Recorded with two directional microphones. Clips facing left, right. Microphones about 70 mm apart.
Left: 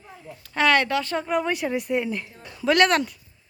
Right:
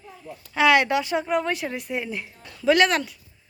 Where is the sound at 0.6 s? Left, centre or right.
Centre.